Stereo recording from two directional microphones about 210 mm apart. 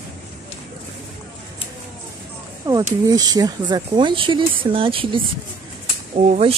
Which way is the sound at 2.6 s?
20° right (ahead or behind).